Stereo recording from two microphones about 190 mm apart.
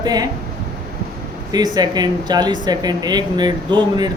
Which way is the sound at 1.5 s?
20° right (ahead or behind).